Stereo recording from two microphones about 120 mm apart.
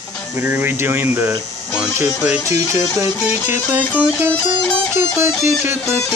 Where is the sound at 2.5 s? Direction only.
25° right (ahead or behind).